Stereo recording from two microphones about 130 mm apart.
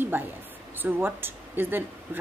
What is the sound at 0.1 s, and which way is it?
Speech, 15° right (ahead or behind).